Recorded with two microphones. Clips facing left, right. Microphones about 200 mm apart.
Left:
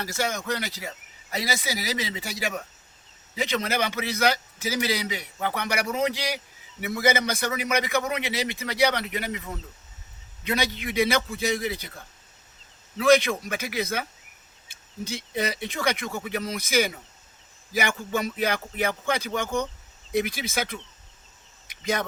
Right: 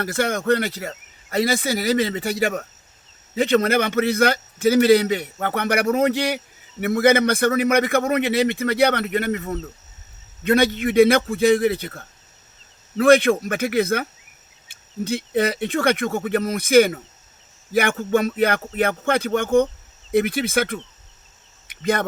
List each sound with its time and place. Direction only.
0.0 s a man's voice: 55° right (ahead or behind)
13.0 s a man's voice: 55° right (ahead or behind)
21.7 s insect: 55° right (ahead or behind)